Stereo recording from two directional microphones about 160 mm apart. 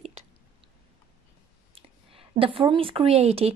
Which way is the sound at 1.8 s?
35° right (ahead or behind).